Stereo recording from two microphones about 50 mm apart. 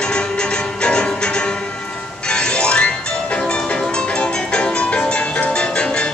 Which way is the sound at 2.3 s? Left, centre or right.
Centre.